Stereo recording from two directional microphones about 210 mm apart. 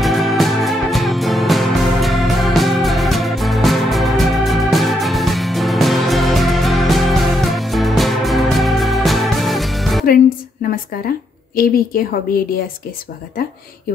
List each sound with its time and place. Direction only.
0.0 s music: centre (ahead or behind)
10.7 s a woman's voice: 45° left (ahead or behind)